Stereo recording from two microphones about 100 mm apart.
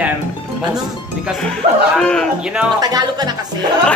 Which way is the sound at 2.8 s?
45° right (ahead or behind).